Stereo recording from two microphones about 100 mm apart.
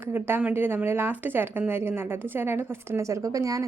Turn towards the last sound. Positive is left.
turn(degrees=-35)  # may be behind; listen again after turning